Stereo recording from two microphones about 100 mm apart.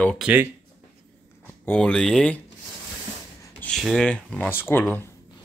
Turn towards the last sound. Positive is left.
turn(degrees=20)  # may be behind; listen again after turning